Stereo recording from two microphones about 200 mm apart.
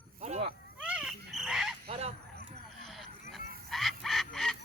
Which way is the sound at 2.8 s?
Centre (ahead or behind).